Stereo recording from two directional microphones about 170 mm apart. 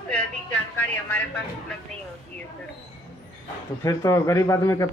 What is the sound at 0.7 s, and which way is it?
Speech, 10° left (ahead or behind).